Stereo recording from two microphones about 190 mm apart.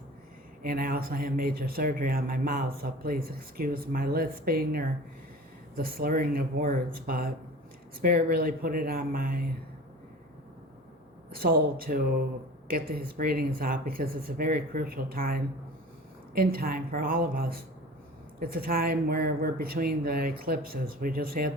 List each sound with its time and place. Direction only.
0.6 s a man's voice: 50° right (ahead or behind)
11.3 s a man's voice: 50° right (ahead or behind)